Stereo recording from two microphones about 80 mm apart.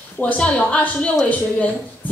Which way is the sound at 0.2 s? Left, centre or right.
Centre.